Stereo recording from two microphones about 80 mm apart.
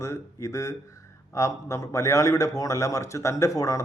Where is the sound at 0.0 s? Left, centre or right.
Left.